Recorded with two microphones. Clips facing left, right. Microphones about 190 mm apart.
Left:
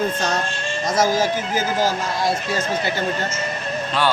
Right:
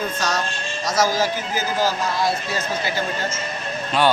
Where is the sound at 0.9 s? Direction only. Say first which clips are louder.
Left 1 dB; 50° left (ahead or behind).